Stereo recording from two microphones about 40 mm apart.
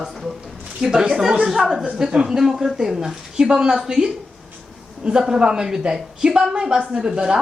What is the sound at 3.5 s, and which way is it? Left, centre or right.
A woman's voice, right.